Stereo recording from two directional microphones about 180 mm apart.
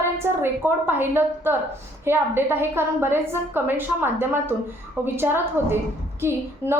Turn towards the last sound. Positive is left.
turn(degrees=-15)  # may be behind; listen again after turning